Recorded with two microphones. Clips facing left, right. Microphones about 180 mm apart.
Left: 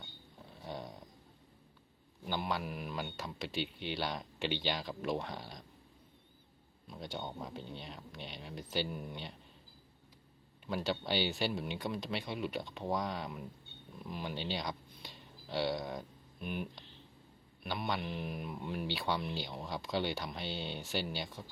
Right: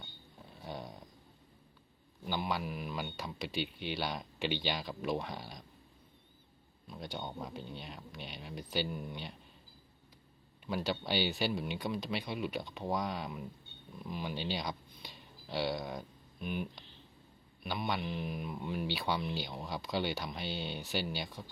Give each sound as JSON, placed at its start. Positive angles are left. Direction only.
{"t": 0.6, "sound": "snoring", "side_deg": -5}
{"t": 2.2, "sound": "speech", "side_deg": 0}
{"t": 3.5, "sound": "speech", "side_deg": 25}
{"t": 3.9, "sound": "speech", "side_deg": -5}
{"t": 6.9, "sound": "speech", "side_deg": 0}
{"t": 7.8, "sound": "speech", "side_deg": -10}
{"t": 10.7, "sound": "speech", "side_deg": -5}